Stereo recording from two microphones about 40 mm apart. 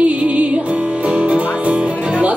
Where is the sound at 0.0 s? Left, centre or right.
Right.